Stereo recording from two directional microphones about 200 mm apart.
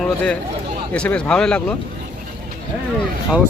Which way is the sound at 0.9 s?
5° left (ahead or behind).